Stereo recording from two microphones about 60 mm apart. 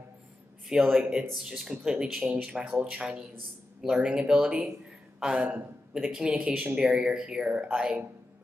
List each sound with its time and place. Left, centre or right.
0.7 s speech: centre
5.9 s speech: centre
6.2 s speech: right